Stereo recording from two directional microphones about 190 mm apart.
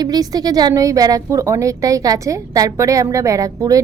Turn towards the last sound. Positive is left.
turn(degrees=-15)  # may be behind; listen again after turning